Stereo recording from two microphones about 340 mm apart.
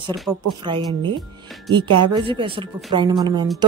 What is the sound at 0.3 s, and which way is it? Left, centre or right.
A woman's voice, centre.